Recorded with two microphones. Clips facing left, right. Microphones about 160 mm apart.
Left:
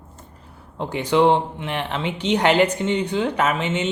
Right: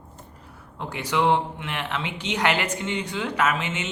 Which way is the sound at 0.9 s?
30° left (ahead or behind).